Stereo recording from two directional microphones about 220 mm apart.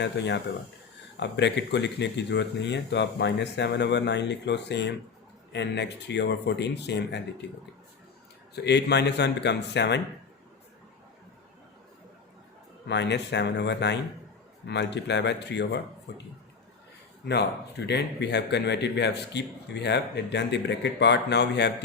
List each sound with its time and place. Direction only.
0.2 s a man's voice: 50° left (ahead or behind)
8.5 s a man's voice: 50° left (ahead or behind)
12.9 s a man's voice: 50° left (ahead or behind)
17.2 s a man's voice: 50° left (ahead or behind)